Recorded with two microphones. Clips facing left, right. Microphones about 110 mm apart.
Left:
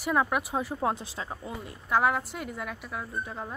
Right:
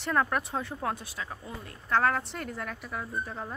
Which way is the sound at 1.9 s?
5° left (ahead or behind).